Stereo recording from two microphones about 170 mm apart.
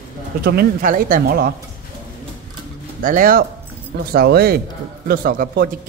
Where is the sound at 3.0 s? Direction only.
55° right (ahead or behind).